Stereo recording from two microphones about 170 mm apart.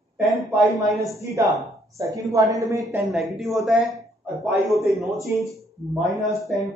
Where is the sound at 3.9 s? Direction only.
15° right (ahead or behind).